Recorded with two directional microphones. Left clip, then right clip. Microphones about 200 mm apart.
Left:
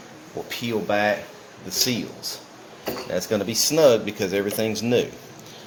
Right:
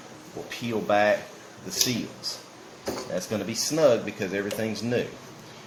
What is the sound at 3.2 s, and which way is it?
Speech, 35° left (ahead or behind).